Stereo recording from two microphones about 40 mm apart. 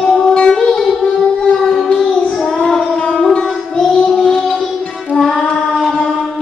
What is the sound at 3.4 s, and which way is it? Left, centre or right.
Music, left.